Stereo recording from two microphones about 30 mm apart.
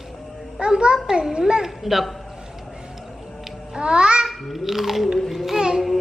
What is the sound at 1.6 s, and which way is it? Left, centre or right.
Speech, centre.